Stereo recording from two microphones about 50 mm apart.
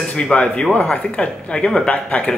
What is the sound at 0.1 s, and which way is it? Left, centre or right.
Speech, centre.